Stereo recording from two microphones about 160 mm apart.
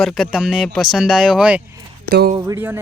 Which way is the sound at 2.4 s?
20° right (ahead or behind).